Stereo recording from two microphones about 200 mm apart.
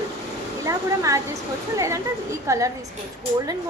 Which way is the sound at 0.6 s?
15° right (ahead or behind).